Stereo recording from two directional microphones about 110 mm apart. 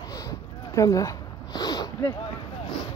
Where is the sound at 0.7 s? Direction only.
30° left (ahead or behind).